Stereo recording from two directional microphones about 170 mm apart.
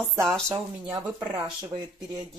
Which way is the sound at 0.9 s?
20° right (ahead or behind).